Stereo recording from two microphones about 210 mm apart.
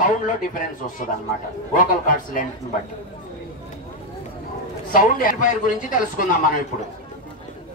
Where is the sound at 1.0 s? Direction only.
35° left (ahead or behind).